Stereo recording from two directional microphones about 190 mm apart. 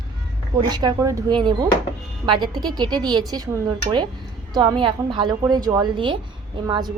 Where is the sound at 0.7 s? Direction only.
20° right (ahead or behind).